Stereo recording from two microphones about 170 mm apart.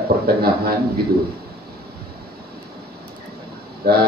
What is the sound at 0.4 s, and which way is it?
Speech, 65° right (ahead or behind).